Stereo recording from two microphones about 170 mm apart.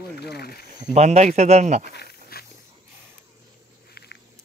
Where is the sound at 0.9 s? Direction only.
40° right (ahead or behind).